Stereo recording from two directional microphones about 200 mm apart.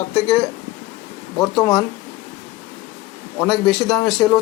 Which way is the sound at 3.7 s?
Centre (ahead or behind).